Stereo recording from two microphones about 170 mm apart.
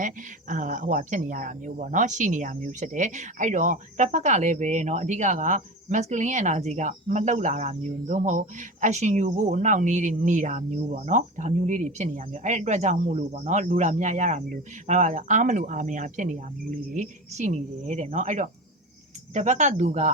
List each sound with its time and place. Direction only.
0.0 s speech: 50° right (ahead or behind)